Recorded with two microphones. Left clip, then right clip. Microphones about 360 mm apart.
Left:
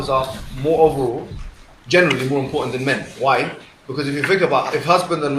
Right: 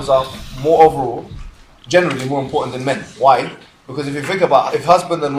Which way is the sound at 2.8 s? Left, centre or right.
Centre.